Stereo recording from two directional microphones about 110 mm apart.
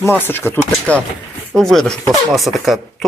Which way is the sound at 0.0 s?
20° left (ahead or behind).